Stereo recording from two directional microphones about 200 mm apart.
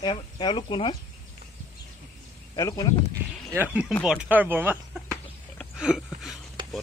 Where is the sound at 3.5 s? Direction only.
10° right (ahead or behind).